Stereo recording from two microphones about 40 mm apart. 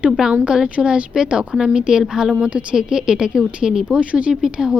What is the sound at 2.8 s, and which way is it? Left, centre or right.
Speech, centre.